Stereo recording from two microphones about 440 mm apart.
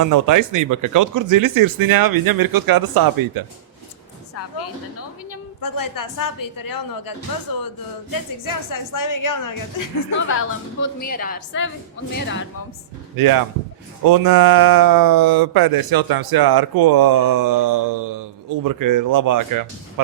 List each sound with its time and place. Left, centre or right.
0.0 s speech: right
5.6 s a woman's voice: left
8.4 s a woman's voice: left
11.0 s a woman's voice: centre
13.1 s speech: right